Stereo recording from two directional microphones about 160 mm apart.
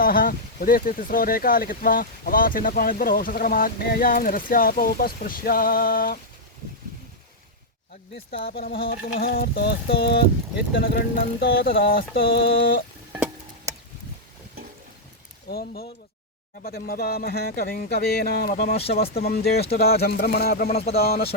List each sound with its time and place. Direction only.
0.0 s speech: 65° left (ahead or behind)
8.1 s speech: 85° left
8.9 s speech: 65° left (ahead or behind)
15.4 s speech: 75° left (ahead or behind)
19.1 s speech: 80° left
20.7 s speech: 40° left (ahead or behind)
21.0 s speech: 70° left (ahead or behind)